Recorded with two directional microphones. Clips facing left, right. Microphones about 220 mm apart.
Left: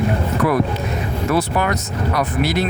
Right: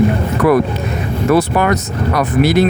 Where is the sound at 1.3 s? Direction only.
60° right (ahead or behind).